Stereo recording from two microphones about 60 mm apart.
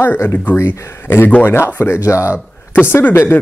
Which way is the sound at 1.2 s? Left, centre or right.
Left.